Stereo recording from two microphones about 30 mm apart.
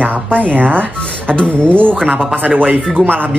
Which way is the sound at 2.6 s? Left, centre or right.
Right.